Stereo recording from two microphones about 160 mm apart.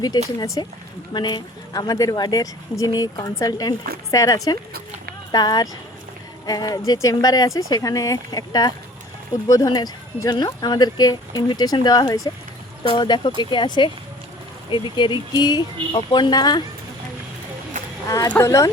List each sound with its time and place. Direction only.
0.3 s a woman's voice: 20° left (ahead or behind)
18.0 s a sound: 20° left (ahead or behind)
18.3 s a woman's voice: 15° left (ahead or behind)